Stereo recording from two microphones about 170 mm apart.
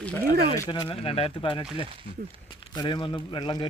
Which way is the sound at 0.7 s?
30° left (ahead or behind).